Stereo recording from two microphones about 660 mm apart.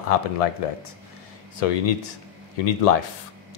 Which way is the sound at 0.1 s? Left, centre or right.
Left.